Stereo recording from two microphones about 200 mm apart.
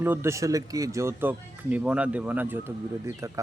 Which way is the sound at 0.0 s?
10° right (ahead or behind).